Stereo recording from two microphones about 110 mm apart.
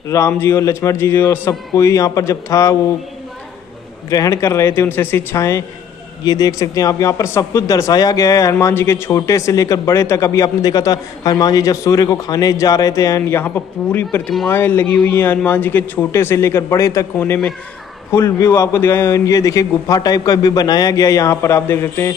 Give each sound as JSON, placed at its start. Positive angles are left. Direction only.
{"t": 0.3, "sound": "a man's voice", "side_deg": 20}
{"t": 4.1, "sound": "a man's voice", "side_deg": 30}
{"t": 6.2, "sound": "speech", "side_deg": 35}
{"t": 14.1, "sound": "a man's voice", "side_deg": 15}